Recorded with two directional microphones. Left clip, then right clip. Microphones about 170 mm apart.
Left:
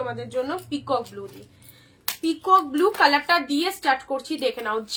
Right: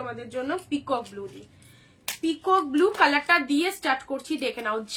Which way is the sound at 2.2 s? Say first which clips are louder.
Left 4 dB; 10° right (ahead or behind).